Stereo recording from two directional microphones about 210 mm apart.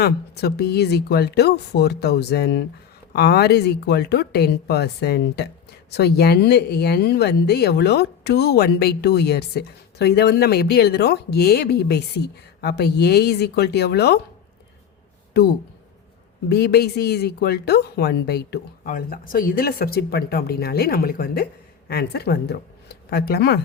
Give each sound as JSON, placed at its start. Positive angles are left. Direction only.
{"t": 0.0, "sound": "speech", "side_deg": 50}
{"t": 15.3, "sound": "speech", "side_deg": 50}